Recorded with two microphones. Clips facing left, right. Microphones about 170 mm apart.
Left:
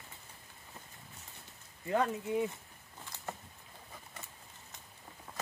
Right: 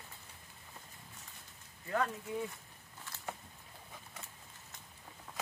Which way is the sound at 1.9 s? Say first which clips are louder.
Left 4 dB; 20° left (ahead or behind).